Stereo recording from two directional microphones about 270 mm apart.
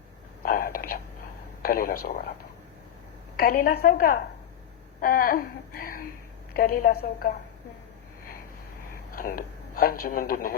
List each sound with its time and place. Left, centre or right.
0.4 s whispering: left
1.6 s a woman's voice: left
3.3 s a woman's voice: left
4.9 s a sound: left
6.5 s a woman's voice: left
9.1 s a woman's voice: left